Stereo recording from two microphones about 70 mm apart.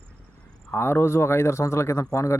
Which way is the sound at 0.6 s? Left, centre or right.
Left.